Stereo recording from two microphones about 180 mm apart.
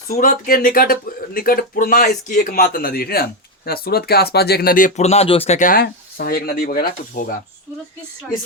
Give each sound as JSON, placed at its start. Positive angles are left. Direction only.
{"t": 0.1, "sound": "speech", "side_deg": 50}
{"t": 5.8, "sound": "speech", "side_deg": 55}